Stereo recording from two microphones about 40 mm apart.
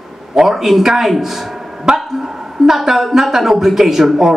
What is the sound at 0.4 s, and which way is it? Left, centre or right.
Speech, centre.